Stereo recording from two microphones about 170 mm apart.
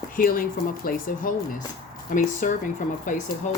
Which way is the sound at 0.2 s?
55° left (ahead or behind).